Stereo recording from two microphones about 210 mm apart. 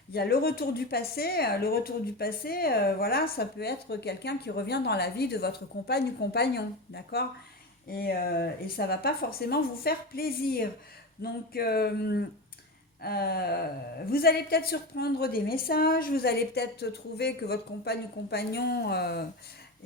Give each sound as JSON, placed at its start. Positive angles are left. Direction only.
{"t": 0.1, "sound": "a woman's voice", "side_deg": 50}